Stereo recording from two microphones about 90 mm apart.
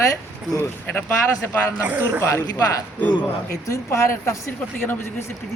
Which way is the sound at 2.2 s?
30° left (ahead or behind).